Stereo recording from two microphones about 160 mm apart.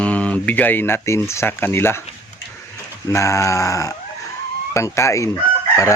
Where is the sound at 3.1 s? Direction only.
20° left (ahead or behind).